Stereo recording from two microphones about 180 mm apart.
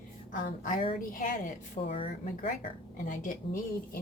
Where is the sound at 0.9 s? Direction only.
50° left (ahead or behind).